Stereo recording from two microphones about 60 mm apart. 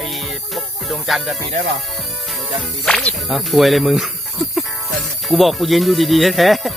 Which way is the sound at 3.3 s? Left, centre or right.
Centre.